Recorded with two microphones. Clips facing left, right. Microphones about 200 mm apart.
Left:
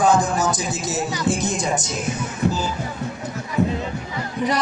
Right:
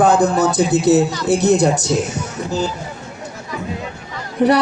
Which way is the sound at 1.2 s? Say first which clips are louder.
Right 7 dB; 65° right (ahead or behind).